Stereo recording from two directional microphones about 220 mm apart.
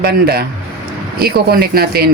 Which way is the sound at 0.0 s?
45° right (ahead or behind).